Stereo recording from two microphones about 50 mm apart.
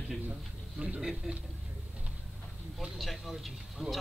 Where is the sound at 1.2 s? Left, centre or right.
Centre.